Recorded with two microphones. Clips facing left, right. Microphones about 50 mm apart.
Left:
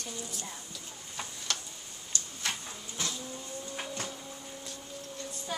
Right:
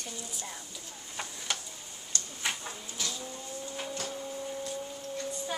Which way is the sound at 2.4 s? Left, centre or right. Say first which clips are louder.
Right 2 dB; centre.